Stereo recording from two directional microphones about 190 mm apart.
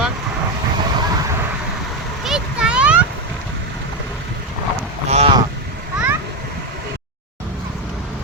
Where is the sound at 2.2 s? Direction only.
5° right (ahead or behind).